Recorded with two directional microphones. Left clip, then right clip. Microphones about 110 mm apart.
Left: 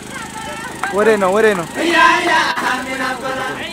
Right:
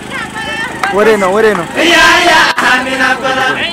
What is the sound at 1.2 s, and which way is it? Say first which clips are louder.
Speech: right 4 dB; 25° left (ahead or behind).